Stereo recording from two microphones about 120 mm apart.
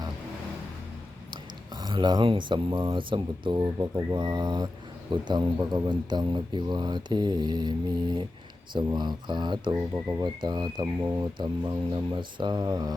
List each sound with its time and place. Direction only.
1.3 s speech: 40° right (ahead or behind)
9.7 s speech: 25° right (ahead or behind)
10.2 s speech: 40° right (ahead or behind)
11.0 s speech: 25° right (ahead or behind)
11.3 s speech: 40° right (ahead or behind)